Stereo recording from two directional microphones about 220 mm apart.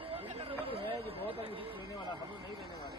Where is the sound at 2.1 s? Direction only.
20° right (ahead or behind).